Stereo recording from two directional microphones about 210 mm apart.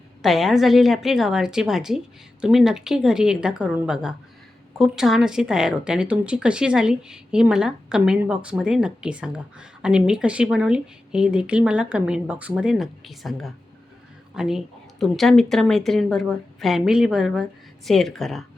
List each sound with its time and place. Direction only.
0.2 s a woman's voice: centre (ahead or behind)